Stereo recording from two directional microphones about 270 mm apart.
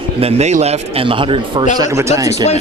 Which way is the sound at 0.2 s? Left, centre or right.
Right.